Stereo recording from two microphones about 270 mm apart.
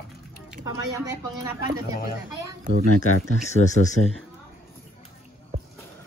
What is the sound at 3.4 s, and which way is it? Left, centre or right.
Speech, left.